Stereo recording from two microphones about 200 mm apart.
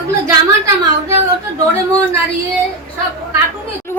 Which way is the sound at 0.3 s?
15° right (ahead or behind).